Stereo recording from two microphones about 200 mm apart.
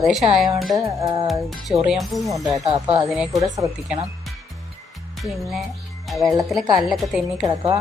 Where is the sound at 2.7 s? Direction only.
30° right (ahead or behind).